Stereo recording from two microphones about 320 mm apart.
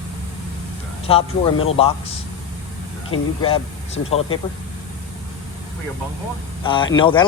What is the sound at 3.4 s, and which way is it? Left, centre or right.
Speech, centre.